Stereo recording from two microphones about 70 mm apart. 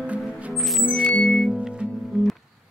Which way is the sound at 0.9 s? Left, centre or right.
Centre.